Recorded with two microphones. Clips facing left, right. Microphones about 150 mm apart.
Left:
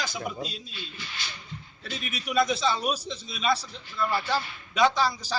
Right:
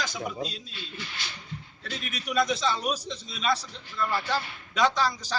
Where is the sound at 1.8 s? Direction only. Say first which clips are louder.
Left 1 dB; 5° left (ahead or behind).